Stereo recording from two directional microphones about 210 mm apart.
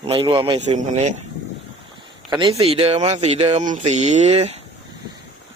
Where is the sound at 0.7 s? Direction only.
35° right (ahead or behind).